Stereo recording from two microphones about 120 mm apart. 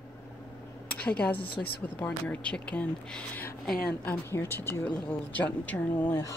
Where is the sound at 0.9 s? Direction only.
10° left (ahead or behind).